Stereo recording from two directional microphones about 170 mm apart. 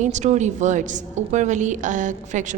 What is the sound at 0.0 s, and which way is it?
A woman's voice, 45° right (ahead or behind).